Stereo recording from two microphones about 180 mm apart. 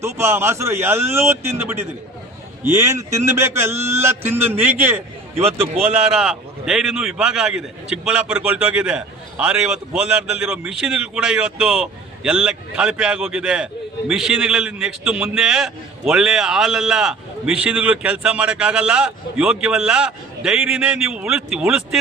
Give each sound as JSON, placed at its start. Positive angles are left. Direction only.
{"t": 0.0, "sound": "speech", "side_deg": -15}
{"t": 5.3, "sound": "a man's voice", "side_deg": -35}
{"t": 5.8, "sound": "a man's voice", "side_deg": -5}